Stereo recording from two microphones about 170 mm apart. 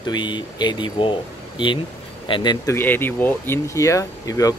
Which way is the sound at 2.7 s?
10° left (ahead or behind).